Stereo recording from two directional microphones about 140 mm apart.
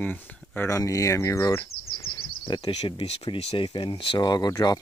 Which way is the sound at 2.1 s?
35° left (ahead or behind).